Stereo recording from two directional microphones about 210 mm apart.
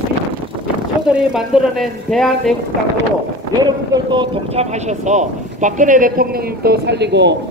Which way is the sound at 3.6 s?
20° right (ahead or behind).